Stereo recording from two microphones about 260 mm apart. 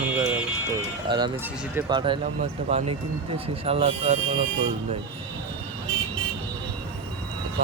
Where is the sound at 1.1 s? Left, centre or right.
Centre.